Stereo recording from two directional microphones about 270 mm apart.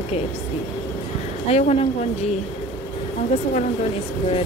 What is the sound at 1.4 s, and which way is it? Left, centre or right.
Speech, left.